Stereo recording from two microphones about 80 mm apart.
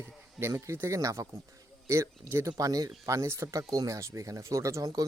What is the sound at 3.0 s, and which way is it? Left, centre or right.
Speech, right.